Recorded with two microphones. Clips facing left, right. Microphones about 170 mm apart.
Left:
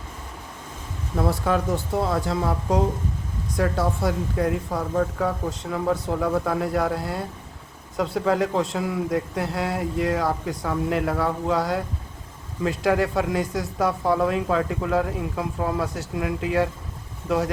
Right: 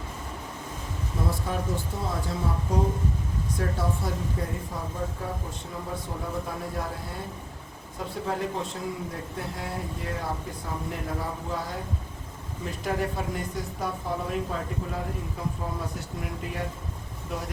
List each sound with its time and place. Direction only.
1.1 s speech: 75° left (ahead or behind)
2.2 s speech: 85° left
7.9 s speech: 90° left